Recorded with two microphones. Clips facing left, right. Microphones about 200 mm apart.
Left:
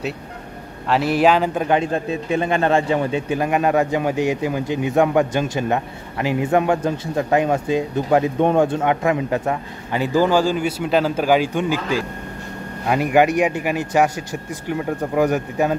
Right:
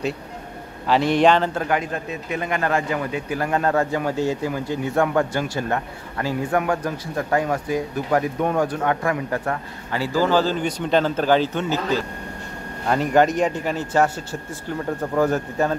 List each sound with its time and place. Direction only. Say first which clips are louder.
0.8 s a man's voice: even; 5° left (ahead or behind)
1.8 s a man's voice: left 6 dB; 30° left (ahead or behind); by 15.8 s 15° left (ahead or behind)